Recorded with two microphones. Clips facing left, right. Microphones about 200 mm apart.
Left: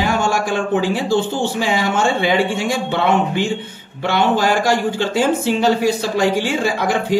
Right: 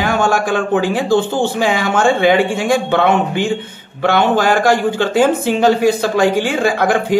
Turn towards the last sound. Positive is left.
turn(degrees=-55)  # may be behind; listen again after turning